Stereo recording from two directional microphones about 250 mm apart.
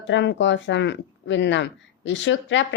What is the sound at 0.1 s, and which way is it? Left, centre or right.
Speech, left.